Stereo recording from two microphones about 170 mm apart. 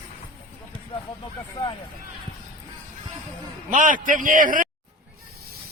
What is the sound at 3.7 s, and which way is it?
A man's voice, 50° right (ahead or behind).